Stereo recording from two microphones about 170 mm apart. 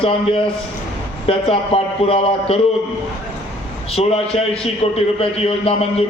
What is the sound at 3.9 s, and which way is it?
A man's voice, 35° left (ahead or behind).